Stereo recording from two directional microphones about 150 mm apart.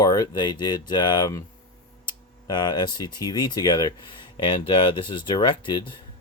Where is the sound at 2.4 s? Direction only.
30° left (ahead or behind).